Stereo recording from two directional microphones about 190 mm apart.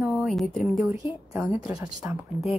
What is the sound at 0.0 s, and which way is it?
Speech, centre (ahead or behind).